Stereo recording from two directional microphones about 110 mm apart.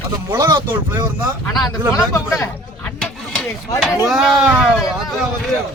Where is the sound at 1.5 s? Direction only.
35° left (ahead or behind).